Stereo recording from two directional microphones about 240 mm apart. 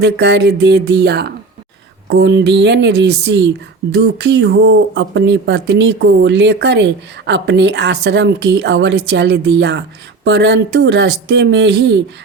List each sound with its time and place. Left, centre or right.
0.0 s speech: right